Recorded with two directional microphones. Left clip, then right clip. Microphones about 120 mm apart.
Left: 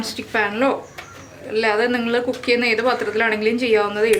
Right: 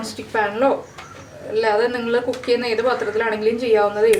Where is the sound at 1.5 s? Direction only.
25° left (ahead or behind).